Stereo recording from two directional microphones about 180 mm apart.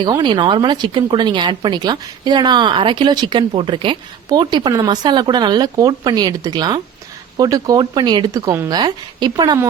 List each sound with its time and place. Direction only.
0.0 s a woman's voice: 25° right (ahead or behind)